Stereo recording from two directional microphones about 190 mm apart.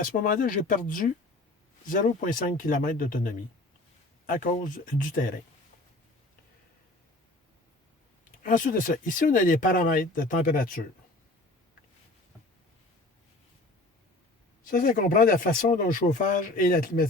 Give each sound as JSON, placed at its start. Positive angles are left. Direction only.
{"t": 0.0, "sound": "speech", "side_deg": 45}
{"t": 4.5, "sound": "speech", "side_deg": 45}
{"t": 8.4, "sound": "speech", "side_deg": 45}
{"t": 14.7, "sound": "speech", "side_deg": 45}